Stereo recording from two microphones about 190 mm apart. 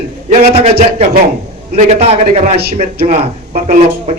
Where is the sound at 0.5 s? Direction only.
30° right (ahead or behind).